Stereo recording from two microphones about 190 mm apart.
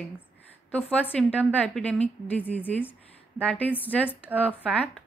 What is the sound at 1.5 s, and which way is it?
A woman's voice, 5° left (ahead or behind).